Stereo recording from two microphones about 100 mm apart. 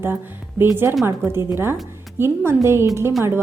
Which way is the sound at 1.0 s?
25° right (ahead or behind).